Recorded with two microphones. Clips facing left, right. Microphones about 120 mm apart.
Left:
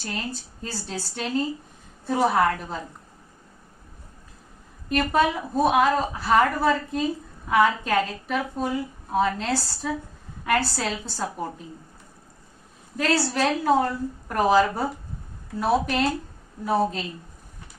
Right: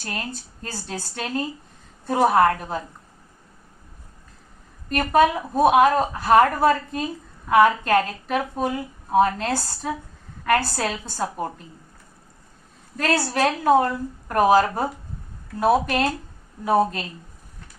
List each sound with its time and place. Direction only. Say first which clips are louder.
0.6 s a woman's voice: even; 50° right (ahead or behind)
4.9 s a woman's voice: right 3 dB; 50° right (ahead or behind)
13.0 s a woman's voice: right 1 dB; 45° right (ahead or behind)